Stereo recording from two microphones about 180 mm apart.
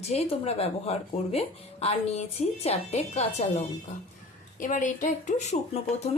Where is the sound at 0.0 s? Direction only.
35° left (ahead or behind).